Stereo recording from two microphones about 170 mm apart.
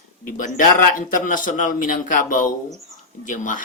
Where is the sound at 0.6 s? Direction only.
50° left (ahead or behind).